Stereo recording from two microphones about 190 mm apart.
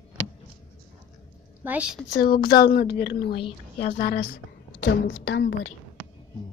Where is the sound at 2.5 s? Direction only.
55° left (ahead or behind).